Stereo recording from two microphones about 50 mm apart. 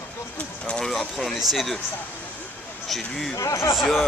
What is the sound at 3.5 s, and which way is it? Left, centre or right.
Speech, left.